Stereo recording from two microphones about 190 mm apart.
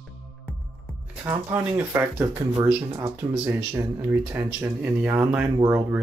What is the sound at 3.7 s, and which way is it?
Speech, 10° right (ahead or behind).